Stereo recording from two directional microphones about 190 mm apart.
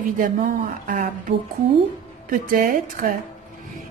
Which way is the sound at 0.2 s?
45° right (ahead or behind).